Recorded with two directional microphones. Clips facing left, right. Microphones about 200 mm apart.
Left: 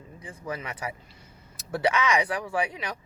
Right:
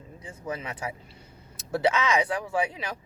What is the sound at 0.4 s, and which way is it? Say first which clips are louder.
Speech: right 1 dB; 25° right (ahead or behind).